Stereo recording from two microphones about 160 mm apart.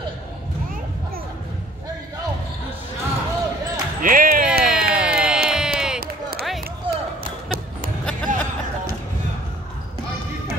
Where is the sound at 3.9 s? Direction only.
60° right (ahead or behind).